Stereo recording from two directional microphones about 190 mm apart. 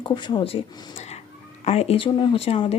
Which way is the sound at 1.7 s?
35° left (ahead or behind).